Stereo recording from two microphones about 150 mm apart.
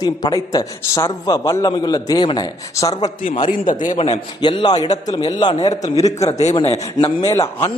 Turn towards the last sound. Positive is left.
turn(degrees=20)  # may be behind; listen again after turning